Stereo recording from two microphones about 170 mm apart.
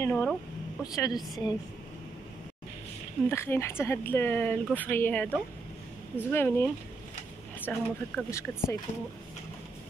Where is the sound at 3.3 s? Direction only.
15° left (ahead or behind).